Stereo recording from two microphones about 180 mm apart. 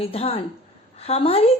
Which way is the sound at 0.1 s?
35° left (ahead or behind).